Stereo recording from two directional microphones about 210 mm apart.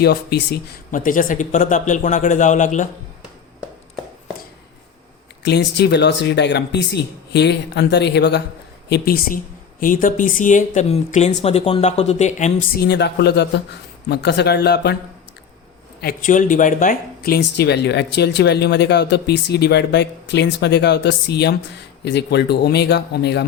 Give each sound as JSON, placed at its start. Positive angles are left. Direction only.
{"t": 0.0, "sound": "speech", "side_deg": 50}
{"t": 5.4, "sound": "speech", "side_deg": 55}
{"t": 16.0, "sound": "speech", "side_deg": 40}